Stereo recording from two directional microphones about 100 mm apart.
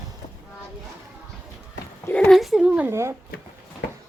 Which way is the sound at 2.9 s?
30° right (ahead or behind).